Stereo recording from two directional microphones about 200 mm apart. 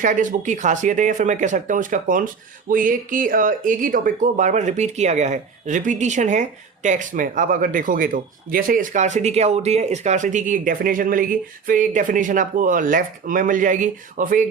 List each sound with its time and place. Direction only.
0.0 s speech: 40° right (ahead or behind)